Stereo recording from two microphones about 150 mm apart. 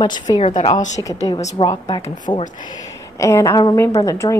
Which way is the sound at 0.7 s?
55° left (ahead or behind).